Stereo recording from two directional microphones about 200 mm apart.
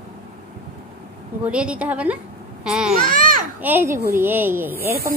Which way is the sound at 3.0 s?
45° right (ahead or behind).